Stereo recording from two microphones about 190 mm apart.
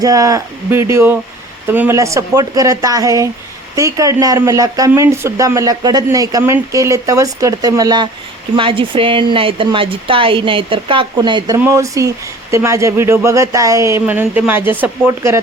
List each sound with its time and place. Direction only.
0.0 s speech: 20° right (ahead or behind)